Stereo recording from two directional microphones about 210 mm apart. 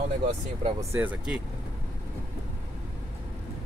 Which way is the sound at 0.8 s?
10° right (ahead or behind).